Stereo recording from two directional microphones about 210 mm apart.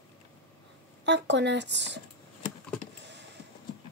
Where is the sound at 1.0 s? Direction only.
55° right (ahead or behind).